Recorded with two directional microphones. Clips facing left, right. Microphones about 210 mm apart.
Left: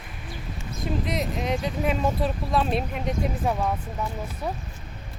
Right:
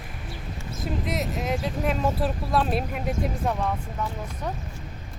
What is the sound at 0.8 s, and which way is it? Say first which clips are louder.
Speech: left 1 dB; centre (ahead or behind).